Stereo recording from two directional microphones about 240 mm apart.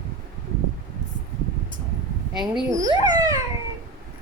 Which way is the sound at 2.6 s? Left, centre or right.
Centre.